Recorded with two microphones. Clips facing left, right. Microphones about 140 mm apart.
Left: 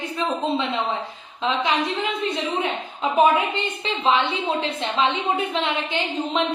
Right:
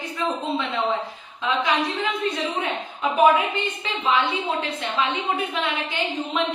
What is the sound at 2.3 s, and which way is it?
A woman's voice, 25° left (ahead or behind).